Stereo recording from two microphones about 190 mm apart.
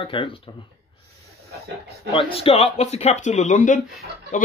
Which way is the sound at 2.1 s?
30° left (ahead or behind).